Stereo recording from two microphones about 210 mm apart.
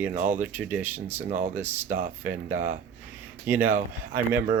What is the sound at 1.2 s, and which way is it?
Speech, 35° right (ahead or behind).